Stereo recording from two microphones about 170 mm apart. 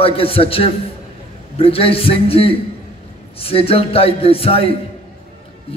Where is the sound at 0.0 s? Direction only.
35° left (ahead or behind).